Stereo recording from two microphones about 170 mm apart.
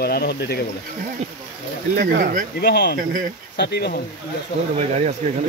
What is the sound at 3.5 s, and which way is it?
Speech, 80° left.